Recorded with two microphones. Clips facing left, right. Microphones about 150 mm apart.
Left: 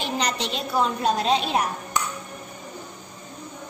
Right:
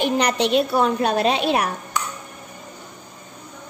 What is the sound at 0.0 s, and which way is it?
A woman's voice, 60° right (ahead or behind).